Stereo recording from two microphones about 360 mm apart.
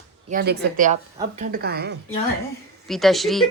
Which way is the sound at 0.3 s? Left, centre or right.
Right.